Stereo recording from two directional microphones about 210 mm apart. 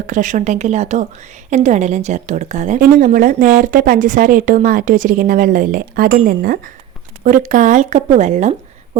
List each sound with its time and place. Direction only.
0.1 s a woman's voice: 35° right (ahead or behind)